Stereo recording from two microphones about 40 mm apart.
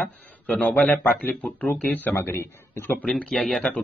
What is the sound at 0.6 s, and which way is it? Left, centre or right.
Speech, left.